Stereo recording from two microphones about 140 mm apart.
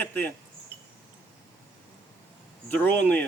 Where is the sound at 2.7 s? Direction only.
10° left (ahead or behind).